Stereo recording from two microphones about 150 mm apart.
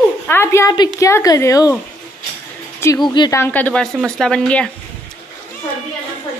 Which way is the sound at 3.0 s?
30° left (ahead or behind).